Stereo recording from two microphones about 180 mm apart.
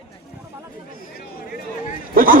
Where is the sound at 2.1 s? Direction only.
50° right (ahead or behind).